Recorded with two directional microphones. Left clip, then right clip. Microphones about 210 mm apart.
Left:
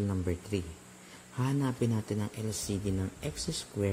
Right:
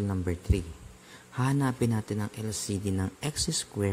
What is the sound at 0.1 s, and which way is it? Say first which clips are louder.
Speech: right 2 dB; 15° right (ahead or behind).